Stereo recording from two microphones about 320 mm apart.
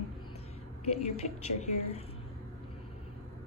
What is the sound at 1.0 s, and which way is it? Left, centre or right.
A woman's voice, centre.